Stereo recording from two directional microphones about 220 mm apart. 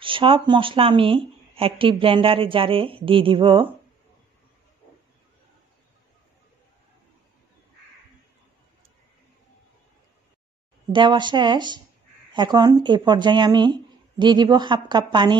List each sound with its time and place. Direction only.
0.0 s speech: 25° right (ahead or behind)
10.9 s speech: 20° right (ahead or behind)